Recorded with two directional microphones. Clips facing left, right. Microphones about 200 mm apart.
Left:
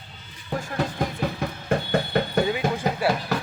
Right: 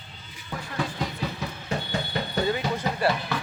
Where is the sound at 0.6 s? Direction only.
45° left (ahead or behind).